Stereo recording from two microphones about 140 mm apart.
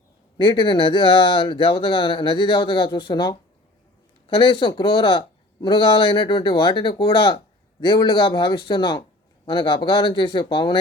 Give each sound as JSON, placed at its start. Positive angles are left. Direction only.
{"t": 0.3, "sound": "speech", "side_deg": 35}